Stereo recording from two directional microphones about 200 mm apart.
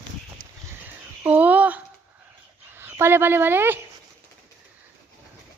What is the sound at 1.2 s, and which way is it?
A child's voice, 10° right (ahead or behind).